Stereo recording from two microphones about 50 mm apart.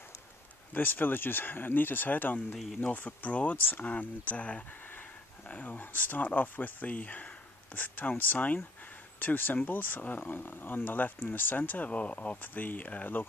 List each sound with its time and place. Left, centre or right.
0.7 s speech: left
2.5 s speech: centre
2.8 s speech: left